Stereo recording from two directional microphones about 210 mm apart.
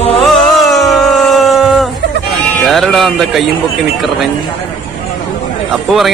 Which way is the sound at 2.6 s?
Centre (ahead or behind).